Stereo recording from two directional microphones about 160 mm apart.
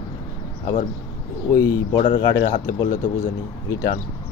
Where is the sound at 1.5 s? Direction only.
20° left (ahead or behind).